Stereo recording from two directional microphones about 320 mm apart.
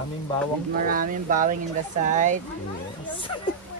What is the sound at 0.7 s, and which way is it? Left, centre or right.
Speech, right.